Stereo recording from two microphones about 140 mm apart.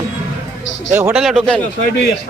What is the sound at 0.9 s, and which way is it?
Speech, 20° right (ahead or behind).